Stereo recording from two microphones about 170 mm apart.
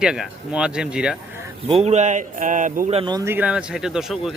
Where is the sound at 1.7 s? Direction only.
40° right (ahead or behind).